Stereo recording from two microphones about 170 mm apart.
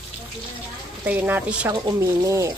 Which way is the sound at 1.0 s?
10° right (ahead or behind).